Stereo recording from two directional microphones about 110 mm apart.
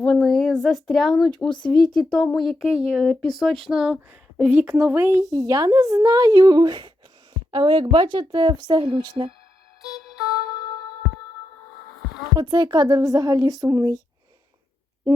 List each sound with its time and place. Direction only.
0.0 s speech: centre (ahead or behind)
1.5 s speech: 45° left (ahead or behind)
2.1 s a woman's voice: 5° left (ahead or behind); by 9.3 s 50° right (ahead or behind)
12.4 s a woman's voice: 40° right (ahead or behind)